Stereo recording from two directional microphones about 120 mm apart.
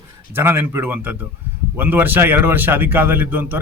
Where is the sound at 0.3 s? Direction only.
20° right (ahead or behind).